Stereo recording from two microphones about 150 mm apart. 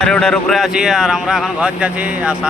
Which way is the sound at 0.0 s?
5° left (ahead or behind).